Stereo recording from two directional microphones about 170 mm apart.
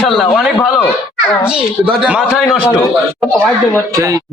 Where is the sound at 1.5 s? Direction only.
5° right (ahead or behind).